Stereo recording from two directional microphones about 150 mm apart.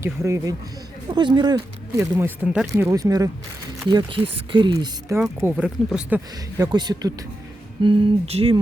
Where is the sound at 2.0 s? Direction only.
15° right (ahead or behind).